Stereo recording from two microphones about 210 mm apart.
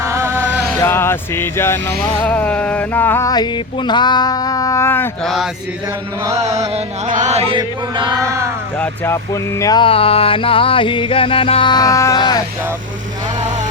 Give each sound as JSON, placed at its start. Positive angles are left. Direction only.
{"t": 0.0, "sound": "music", "side_deg": -15}
{"t": 0.8, "sound": "music", "side_deg": 10}
{"t": 2.2, "sound": "a sound", "side_deg": 5}
{"t": 6.2, "sound": "chant", "side_deg": -15}
{"t": 6.5, "sound": "chant", "side_deg": -30}
{"t": 8.8, "sound": "speech", "side_deg": 10}